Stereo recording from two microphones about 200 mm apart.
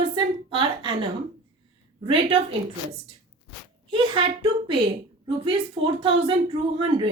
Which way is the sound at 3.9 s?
25° right (ahead or behind).